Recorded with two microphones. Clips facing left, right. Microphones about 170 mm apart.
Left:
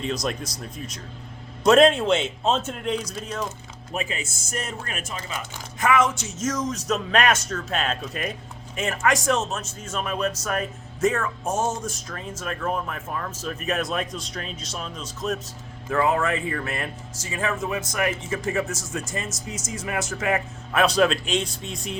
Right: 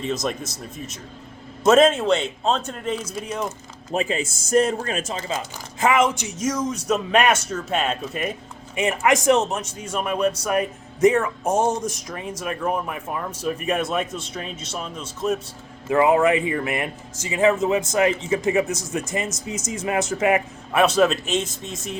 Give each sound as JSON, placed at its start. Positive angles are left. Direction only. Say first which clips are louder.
{"t": 1.6, "sound": "a man's voice", "louder": "right 1 dB", "side_deg": -5}
{"t": 3.9, "sound": "speech", "louder": "right 7 dB", "side_deg": -30}
{"t": 20.7, "sound": "a man's voice", "louder": "right 2 dB", "side_deg": -5}
{"t": 21.4, "sound": "speech", "louder": "right 1 dB", "side_deg": -45}